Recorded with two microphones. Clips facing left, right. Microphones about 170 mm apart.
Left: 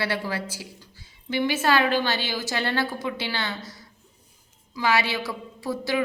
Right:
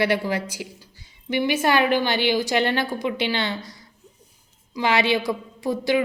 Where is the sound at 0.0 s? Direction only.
15° right (ahead or behind).